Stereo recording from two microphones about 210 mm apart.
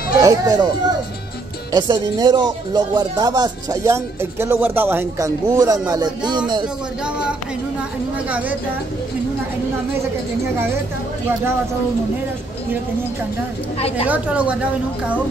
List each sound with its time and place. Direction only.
0.2 s a woman's voice: 15° right (ahead or behind)
1.7 s speech: 20° right (ahead or behind)
8.3 s a woman's voice: 5° right (ahead or behind)
13.7 s speech: 30° left (ahead or behind)
14.0 s a woman's voice: 5° right (ahead or behind)